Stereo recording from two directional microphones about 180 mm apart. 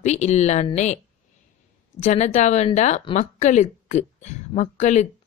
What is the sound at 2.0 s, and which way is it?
Speech, 45° left (ahead or behind).